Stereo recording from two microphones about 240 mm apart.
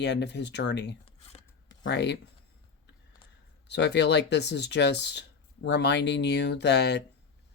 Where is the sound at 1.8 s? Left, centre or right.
Left.